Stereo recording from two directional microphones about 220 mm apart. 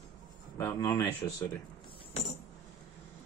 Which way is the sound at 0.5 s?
15° left (ahead or behind).